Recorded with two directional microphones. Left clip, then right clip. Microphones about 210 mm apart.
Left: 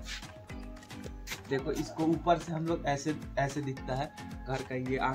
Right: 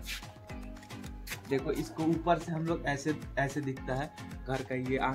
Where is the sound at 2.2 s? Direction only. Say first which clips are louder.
Left 1 dB; 20° right (ahead or behind).